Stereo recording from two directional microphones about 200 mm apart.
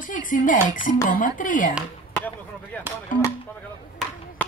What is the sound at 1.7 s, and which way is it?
Chop, 5° left (ahead or behind).